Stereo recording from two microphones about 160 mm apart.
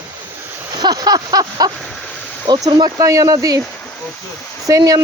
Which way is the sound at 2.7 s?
25° right (ahead or behind).